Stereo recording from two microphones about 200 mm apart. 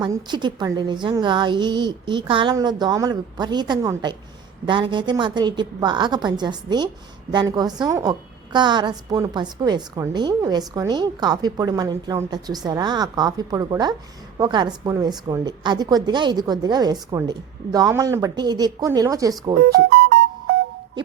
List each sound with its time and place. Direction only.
0.0 s a woman's voice: 20° right (ahead or behind)
19.6 s speech: 50° right (ahead or behind)